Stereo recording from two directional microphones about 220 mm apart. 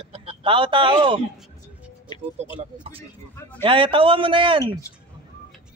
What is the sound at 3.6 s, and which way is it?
A man's voice, 25° right (ahead or behind).